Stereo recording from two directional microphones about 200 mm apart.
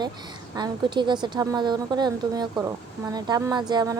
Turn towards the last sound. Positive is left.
turn(degrees=-20)  # may be behind; listen again after turning